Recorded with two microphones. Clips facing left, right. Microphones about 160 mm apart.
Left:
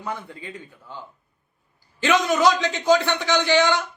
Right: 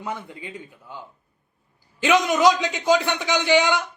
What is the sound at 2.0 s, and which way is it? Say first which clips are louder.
Speech: right 1 dB; 15° right (ahead or behind).